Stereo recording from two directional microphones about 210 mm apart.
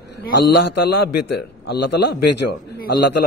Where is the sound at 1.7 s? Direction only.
55° left (ahead or behind).